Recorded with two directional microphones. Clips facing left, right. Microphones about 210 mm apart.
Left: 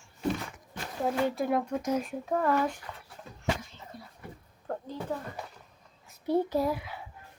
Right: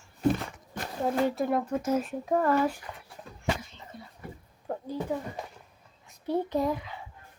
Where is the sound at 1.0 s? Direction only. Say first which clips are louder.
Right 2 dB; centre (ahead or behind).